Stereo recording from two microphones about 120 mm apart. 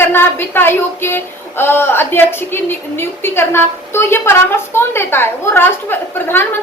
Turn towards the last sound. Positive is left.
turn(degrees=15)  # may be behind; listen again after turning